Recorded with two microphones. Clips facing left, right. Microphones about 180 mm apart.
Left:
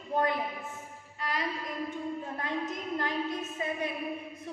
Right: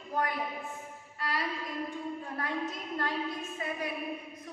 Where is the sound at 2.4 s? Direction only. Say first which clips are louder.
Right 1 dB; 20° left (ahead or behind).